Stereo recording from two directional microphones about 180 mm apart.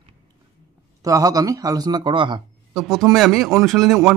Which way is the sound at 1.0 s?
20° right (ahead or behind).